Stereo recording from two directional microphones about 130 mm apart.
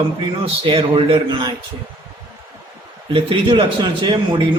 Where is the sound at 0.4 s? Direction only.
45° right (ahead or behind).